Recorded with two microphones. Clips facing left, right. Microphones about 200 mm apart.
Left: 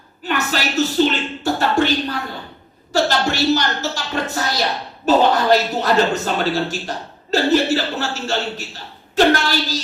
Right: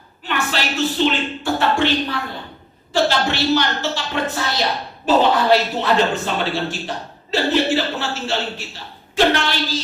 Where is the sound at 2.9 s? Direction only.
40° left (ahead or behind).